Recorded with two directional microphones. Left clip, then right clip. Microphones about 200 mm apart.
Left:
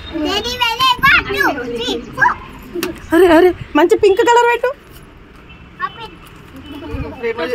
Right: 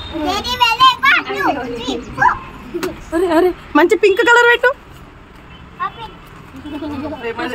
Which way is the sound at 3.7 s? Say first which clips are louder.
Left 1 dB; centre (ahead or behind).